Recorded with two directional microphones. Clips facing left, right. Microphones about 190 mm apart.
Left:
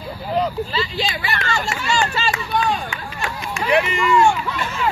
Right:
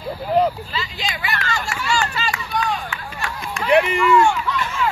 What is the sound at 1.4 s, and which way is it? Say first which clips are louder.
Run: left 2 dB; 20° left (ahead or behind).